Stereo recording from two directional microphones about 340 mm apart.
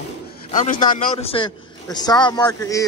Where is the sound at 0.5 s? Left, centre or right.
Left.